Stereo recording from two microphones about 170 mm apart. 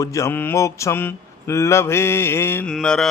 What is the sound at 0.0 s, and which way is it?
A man's voice, 20° left (ahead or behind).